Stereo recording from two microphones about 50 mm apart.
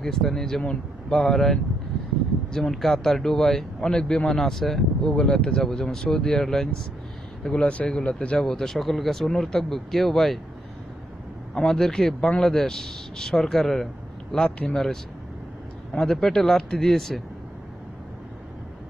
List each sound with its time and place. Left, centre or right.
0.0 s speech: centre
5.0 s speech: centre
7.6 s speech: left
8.4 s speech: centre
11.5 s speech: centre
15.9 s speech: centre